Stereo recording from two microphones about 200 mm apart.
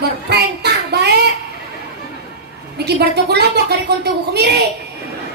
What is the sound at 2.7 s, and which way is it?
Speech, 55° right (ahead or behind).